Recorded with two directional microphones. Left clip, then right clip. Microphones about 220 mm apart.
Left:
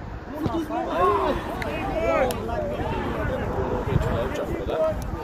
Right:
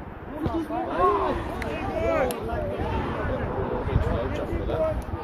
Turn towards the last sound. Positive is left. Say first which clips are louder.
# left 2 dB
turn(degrees=50)  # may be behind; listen again after turning